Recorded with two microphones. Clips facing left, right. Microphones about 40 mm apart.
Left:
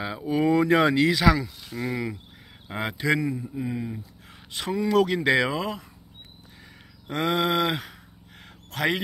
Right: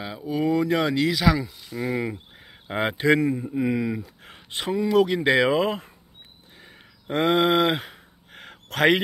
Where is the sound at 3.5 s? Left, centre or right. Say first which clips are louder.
Right 7 dB; right.